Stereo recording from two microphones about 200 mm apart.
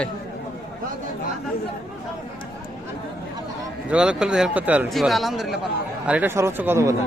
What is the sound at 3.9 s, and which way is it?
Speech, 5° right (ahead or behind).